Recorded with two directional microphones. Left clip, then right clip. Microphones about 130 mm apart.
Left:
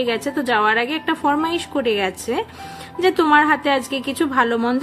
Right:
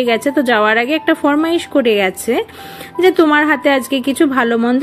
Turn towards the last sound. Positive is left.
turn(degrees=-25)  # may be behind; listen again after turning